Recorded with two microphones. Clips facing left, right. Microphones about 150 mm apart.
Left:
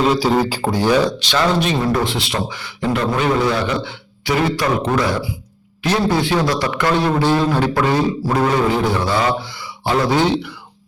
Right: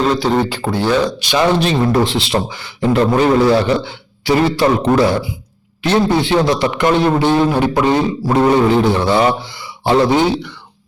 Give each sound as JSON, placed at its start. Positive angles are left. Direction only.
{"t": 0.0, "sound": "speech", "side_deg": 5}
{"t": 1.2, "sound": "speech", "side_deg": -10}
{"t": 1.5, "sound": "a man's voice", "side_deg": -30}